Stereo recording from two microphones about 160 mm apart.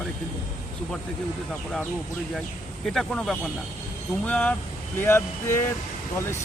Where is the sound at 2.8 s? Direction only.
5° left (ahead or behind).